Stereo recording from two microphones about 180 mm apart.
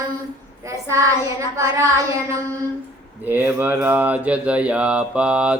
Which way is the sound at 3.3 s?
10° right (ahead or behind).